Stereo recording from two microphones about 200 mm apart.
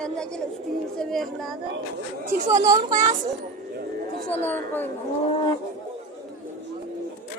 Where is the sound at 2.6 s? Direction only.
15° right (ahead or behind).